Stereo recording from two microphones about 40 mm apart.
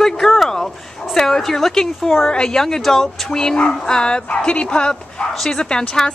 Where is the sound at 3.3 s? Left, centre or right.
Centre.